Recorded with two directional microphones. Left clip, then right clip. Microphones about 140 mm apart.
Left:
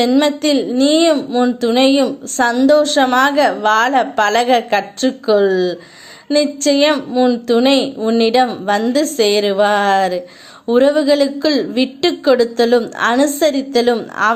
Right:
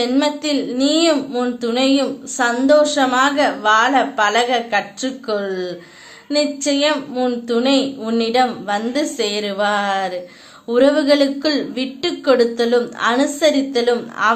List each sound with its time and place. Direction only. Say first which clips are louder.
0.1 s a woman's voice: left 4 dB; 40° left (ahead or behind)
1.1 s a woman's voice: left 4 dB; 30° left (ahead or behind)